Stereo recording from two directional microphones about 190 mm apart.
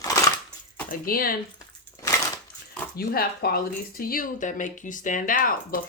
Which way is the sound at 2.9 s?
50° left (ahead or behind).